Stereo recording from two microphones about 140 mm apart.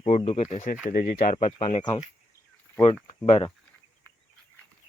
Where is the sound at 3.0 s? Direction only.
45° left (ahead or behind).